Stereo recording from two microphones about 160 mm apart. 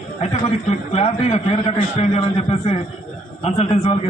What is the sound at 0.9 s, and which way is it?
A man's voice, 45° left (ahead or behind).